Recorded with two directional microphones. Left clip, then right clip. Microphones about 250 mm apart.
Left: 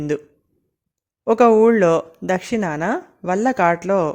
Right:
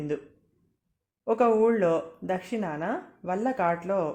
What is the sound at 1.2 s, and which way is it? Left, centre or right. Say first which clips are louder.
Speech: left 9 dB; left.